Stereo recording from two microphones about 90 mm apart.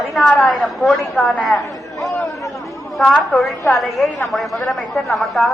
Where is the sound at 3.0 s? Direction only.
Centre (ahead or behind).